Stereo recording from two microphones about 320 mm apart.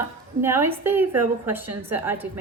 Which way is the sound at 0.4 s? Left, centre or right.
Centre.